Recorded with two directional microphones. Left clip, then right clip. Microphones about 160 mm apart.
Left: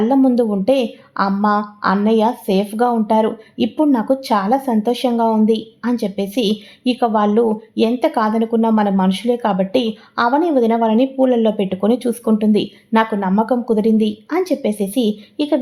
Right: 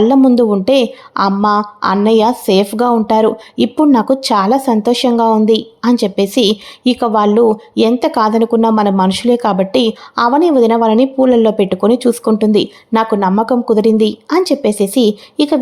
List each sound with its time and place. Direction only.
0.0 s a woman's voice: 30° right (ahead or behind)